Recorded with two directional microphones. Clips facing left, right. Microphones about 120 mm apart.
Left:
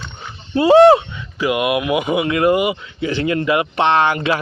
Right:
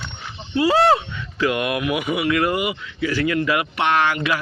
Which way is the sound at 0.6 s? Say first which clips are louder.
Left 8 dB; 25° left (ahead or behind).